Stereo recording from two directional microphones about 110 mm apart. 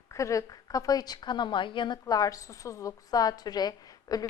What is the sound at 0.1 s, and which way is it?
A woman's voice, 30° left (ahead or behind).